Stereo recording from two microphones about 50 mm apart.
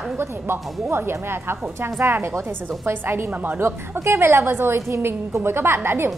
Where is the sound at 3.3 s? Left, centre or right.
Right.